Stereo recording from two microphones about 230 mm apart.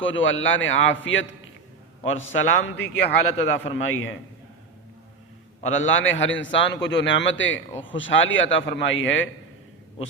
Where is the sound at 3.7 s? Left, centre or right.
Left.